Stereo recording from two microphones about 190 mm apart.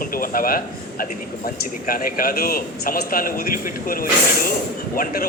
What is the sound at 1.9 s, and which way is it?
Speech, 50° left (ahead or behind).